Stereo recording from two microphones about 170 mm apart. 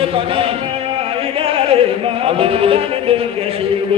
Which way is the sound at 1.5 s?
35° right (ahead or behind).